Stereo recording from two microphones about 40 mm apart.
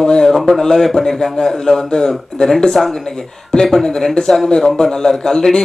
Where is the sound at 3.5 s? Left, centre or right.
Left.